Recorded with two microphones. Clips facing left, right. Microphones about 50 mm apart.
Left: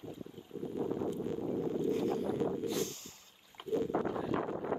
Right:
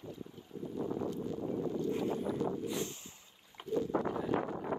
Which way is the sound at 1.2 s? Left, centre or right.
Left.